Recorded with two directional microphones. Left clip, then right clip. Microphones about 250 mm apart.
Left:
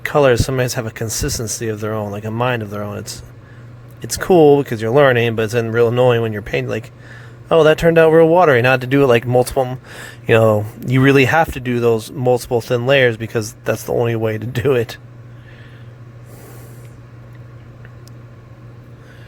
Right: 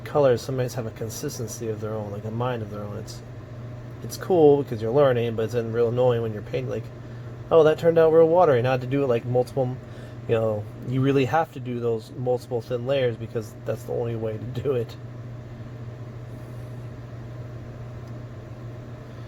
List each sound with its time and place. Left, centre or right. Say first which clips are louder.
0.0 s speech: left 7 dB; left
4.2 s speech: left 7 dB; left